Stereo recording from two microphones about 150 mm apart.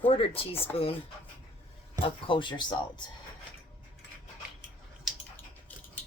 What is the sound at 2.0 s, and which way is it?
Speech, 35° left (ahead or behind).